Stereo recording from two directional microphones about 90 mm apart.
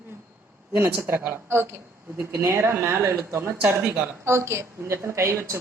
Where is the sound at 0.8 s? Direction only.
25° right (ahead or behind).